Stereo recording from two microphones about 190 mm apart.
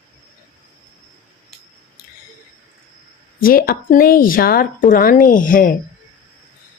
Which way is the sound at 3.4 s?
50° left (ahead or behind).